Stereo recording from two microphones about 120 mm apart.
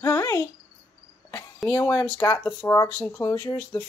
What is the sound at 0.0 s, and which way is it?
Cricket, 25° left (ahead or behind).